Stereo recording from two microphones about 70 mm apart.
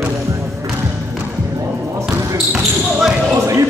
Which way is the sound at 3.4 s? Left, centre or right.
Right.